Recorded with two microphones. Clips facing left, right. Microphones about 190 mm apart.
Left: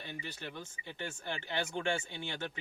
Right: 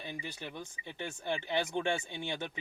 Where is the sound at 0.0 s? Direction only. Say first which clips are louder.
Right 2 dB; 10° right (ahead or behind).